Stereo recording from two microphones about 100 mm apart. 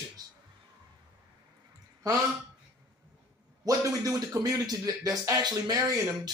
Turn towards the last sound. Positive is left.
turn(degrees=-40)  # may be behind; listen again after turning